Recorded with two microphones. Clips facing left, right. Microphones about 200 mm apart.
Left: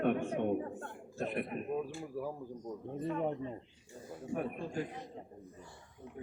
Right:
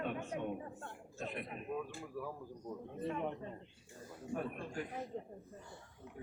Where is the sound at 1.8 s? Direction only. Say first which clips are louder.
Left 5 dB; 30° left (ahead or behind).